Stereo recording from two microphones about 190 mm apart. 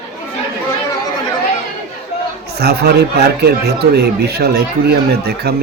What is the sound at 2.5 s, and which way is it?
Speech, 55° right (ahead or behind).